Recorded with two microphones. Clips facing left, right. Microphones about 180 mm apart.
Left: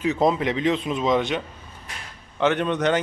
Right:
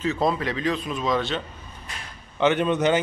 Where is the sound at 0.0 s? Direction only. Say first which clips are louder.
Left 3 dB; 20° left (ahead or behind).